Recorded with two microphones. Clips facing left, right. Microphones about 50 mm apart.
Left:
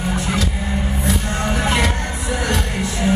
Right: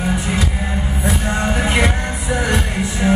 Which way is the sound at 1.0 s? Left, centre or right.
Centre.